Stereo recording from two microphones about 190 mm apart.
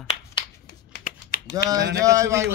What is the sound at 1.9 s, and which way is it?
Speech, 15° right (ahead or behind).